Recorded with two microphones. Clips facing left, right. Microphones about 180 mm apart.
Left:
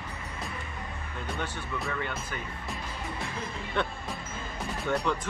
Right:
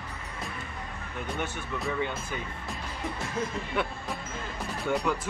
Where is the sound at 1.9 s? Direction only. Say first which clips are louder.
Right 3 dB; 15° right (ahead or behind).